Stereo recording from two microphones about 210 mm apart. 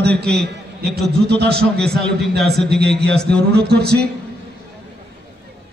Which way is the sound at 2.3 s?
50° right (ahead or behind).